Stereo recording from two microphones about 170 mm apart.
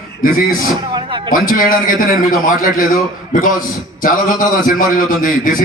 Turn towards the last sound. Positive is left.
turn(degrees=55)  # may be behind; listen again after turning